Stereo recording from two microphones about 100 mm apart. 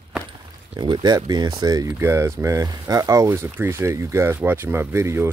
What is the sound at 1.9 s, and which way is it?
Speech, 25° right (ahead or behind).